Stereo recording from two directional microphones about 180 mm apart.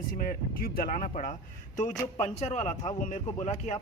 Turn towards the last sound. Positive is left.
turn(degrees=40)  # may be behind; listen again after turning